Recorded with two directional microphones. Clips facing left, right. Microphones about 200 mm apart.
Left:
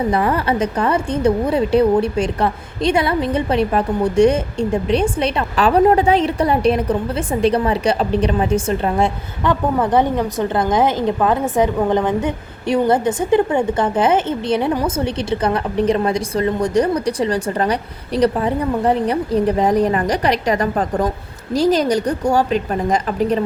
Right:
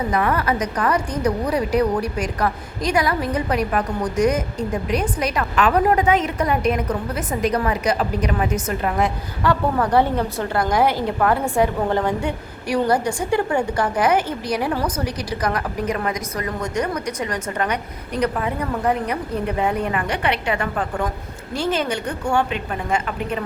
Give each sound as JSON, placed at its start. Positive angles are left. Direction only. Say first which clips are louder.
{"t": 0.1, "sound": "a woman's voice", "louder": "left 3 dB", "side_deg": 30}